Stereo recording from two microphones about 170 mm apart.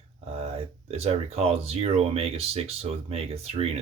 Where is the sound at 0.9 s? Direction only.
35° right (ahead or behind).